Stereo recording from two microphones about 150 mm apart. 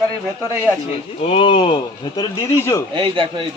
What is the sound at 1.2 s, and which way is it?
Speech, 40° left (ahead or behind).